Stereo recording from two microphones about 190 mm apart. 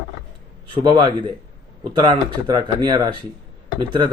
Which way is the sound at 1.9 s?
25° right (ahead or behind).